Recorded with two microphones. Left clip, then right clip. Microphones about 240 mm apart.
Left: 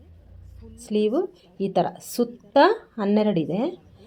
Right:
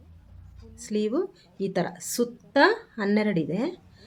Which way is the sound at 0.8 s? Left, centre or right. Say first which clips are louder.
Left 4 dB; centre.